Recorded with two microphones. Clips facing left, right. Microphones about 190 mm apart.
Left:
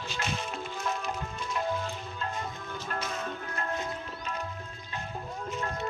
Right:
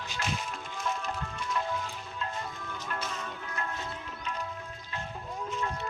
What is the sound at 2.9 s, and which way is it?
Music, 45° left (ahead or behind).